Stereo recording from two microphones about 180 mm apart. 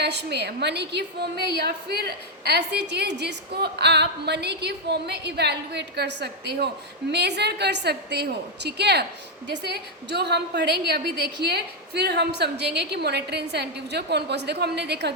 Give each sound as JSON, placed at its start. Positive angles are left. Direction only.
{"t": 0.0, "sound": "a woman's voice", "side_deg": -70}